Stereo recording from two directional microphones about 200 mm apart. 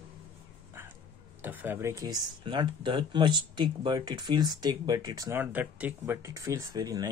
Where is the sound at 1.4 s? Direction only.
10° right (ahead or behind).